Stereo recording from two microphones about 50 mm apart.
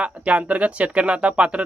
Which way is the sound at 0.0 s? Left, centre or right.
Right.